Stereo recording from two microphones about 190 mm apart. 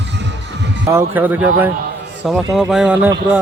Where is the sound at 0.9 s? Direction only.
10° right (ahead or behind).